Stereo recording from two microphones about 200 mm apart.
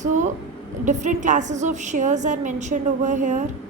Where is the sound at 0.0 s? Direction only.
35° right (ahead or behind).